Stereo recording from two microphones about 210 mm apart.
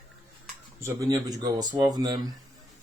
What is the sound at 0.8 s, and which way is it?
Speech, 15° right (ahead or behind).